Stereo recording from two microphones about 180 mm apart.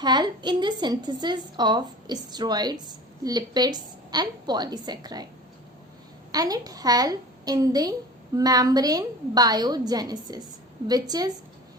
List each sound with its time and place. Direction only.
0.0 s a woman's voice: 25° right (ahead or behind)
6.3 s a woman's voice: 20° right (ahead or behind)